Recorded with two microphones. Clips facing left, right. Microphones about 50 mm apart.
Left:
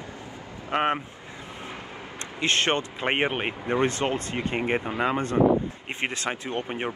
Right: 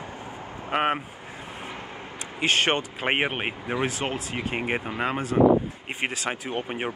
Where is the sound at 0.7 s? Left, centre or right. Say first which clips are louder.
Even; centre.